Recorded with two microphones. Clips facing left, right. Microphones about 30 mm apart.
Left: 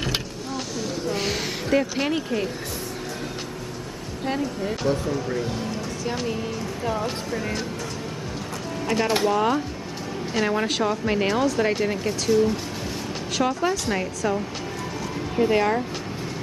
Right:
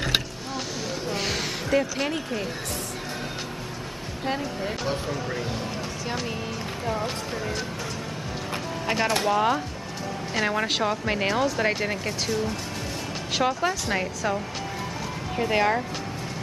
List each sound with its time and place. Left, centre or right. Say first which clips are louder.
1.1 s a sound: left 2 dB; centre
4.2 s a woman's voice: left 2 dB; centre
4.8 s speech: left 7 dB; right
5.1 s speech: left 3 dB; centre
9.2 s a woman's voice: left 1 dB; centre
13.3 s a woman's voice: left 1 dB; centre